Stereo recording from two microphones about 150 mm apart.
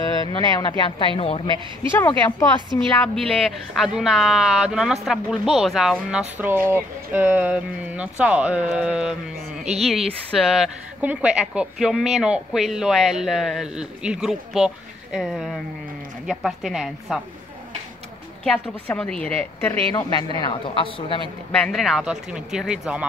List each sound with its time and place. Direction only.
0.3 s speech: 30° left (ahead or behind)
1.9 s a woman's voice: 20° left (ahead or behind)
3.0 s a woman's voice: 5° left (ahead or behind)
18.4 s a woman's voice: 5° left (ahead or behind)
19.9 s a woman's voice: 25° left (ahead or behind)
21.5 s a woman's voice: centre (ahead or behind)